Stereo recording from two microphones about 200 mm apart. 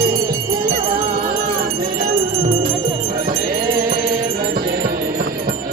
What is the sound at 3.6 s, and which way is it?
Bell, 45° right (ahead or behind).